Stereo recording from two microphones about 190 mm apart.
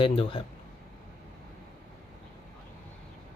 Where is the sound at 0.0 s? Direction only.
30° left (ahead or behind).